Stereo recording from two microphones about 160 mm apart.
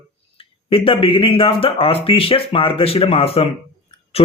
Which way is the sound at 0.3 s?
35° left (ahead or behind).